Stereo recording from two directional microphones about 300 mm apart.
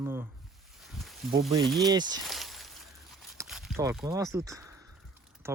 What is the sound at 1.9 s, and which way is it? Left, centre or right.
Speech, centre.